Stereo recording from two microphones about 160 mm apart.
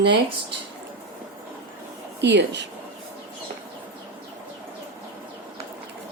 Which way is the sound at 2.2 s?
90° right.